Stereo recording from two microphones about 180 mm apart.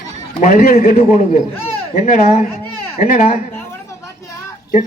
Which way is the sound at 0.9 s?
40° left (ahead or behind).